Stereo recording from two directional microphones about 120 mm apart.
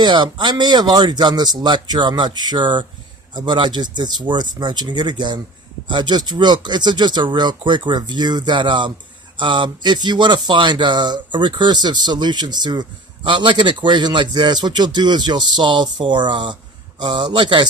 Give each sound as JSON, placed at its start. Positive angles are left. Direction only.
{"t": 0.0, "sound": "speech", "side_deg": -40}